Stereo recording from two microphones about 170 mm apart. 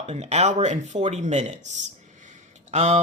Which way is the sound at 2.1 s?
45° right (ahead or behind).